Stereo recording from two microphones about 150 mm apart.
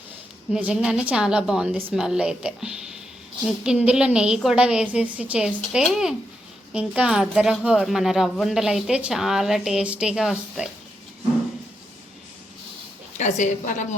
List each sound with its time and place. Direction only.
0.5 s a woman's voice: 5° right (ahead or behind)
13.1 s a woman's voice: 55° left (ahead or behind)